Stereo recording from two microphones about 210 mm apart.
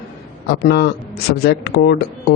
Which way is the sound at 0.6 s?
50° left (ahead or behind).